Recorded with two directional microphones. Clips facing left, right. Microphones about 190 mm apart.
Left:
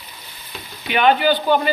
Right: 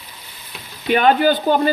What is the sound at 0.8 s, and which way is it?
Speech, 45° right (ahead or behind).